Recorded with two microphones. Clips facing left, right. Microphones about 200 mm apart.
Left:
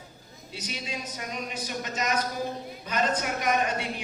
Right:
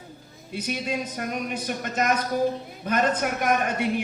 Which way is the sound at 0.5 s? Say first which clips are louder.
Right 8 dB; 55° right (ahead or behind).